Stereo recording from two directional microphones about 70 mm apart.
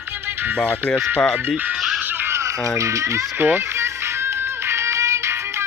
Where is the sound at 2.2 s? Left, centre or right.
Right.